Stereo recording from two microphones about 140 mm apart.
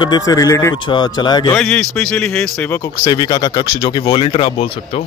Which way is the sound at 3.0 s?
30° left (ahead or behind).